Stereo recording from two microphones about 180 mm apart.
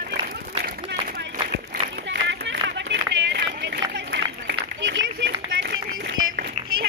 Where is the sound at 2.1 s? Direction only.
75° right (ahead or behind).